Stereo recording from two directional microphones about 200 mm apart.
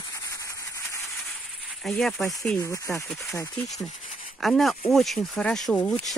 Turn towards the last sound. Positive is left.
turn(degrees=0)  # may be behind; listen again after turning